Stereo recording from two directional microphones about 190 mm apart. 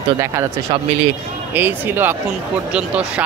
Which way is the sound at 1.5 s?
10° right (ahead or behind).